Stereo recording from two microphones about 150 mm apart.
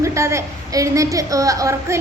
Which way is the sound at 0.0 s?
20° right (ahead or behind).